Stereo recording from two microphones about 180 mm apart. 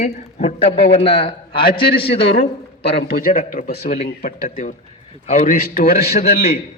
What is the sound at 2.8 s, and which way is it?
A man's voice, 55° left (ahead or behind).